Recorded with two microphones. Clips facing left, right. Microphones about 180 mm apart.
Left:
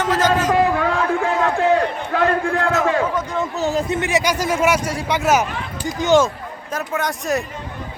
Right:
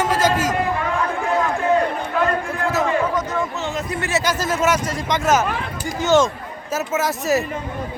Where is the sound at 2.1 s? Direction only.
90° left.